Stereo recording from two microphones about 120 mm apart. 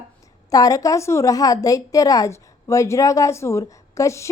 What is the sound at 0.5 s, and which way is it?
A woman's voice, 30° left (ahead or behind).